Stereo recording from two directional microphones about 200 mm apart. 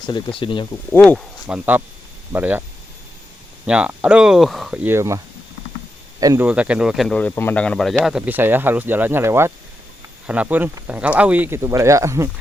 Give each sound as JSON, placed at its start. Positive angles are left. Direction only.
{"t": 0.0, "sound": "speech", "side_deg": 25}
{"t": 0.9, "sound": "speech", "side_deg": 5}
{"t": 1.5, "sound": "speech", "side_deg": -5}
{"t": 3.7, "sound": "speech", "side_deg": -5}
{"t": 6.5, "sound": "speech", "side_deg": -5}